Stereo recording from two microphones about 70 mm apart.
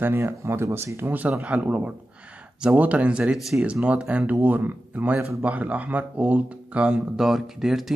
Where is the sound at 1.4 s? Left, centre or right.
Centre.